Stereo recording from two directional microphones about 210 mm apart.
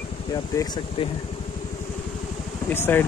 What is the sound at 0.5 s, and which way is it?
Speech, 20° left (ahead or behind).